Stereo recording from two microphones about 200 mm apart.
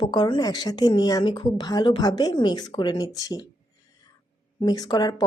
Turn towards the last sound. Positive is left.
turn(degrees=20)  # may be behind; listen again after turning